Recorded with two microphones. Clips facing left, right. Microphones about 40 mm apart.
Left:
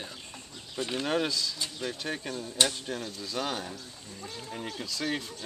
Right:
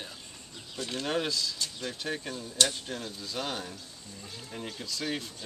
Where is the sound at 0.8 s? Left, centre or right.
Centre.